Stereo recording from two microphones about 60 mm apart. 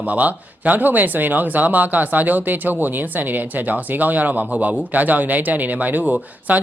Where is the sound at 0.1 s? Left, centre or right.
Right.